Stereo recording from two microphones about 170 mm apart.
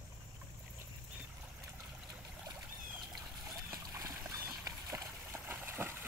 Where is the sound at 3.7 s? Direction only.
20° right (ahead or behind).